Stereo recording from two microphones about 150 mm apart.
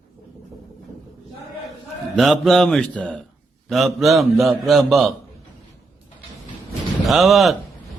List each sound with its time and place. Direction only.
2.1 s a man's voice: centre (ahead or behind)
7.0 s a man's voice: centre (ahead or behind)